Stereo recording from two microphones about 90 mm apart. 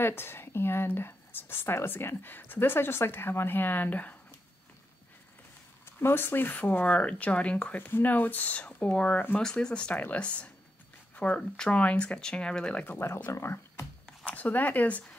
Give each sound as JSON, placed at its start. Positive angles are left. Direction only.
{"t": 0.0, "sound": "speech", "side_deg": 25}
{"t": 5.9, "sound": "speech", "side_deg": 25}
{"t": 12.8, "sound": "speech", "side_deg": 25}
{"t": 14.0, "sound": "speech", "side_deg": 15}